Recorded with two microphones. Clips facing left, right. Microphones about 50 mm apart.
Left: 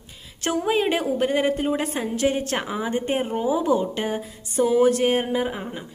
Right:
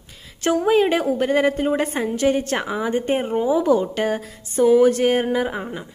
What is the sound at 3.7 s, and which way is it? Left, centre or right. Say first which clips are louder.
Speech: right 3 dB; left.